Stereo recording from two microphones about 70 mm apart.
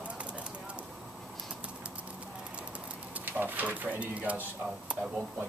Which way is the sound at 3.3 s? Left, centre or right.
Right.